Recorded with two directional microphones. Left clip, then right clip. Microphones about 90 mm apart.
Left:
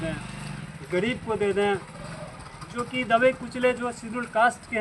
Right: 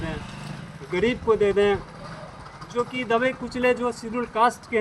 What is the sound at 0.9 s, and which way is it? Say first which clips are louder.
Speech: right 5 dB; 35° left (ahead or behind).